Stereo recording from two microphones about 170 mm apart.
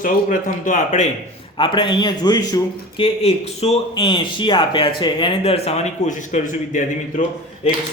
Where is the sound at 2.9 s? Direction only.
35° left (ahead or behind).